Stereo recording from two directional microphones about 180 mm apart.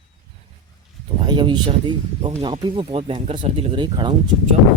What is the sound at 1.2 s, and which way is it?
Speech, 25° right (ahead or behind).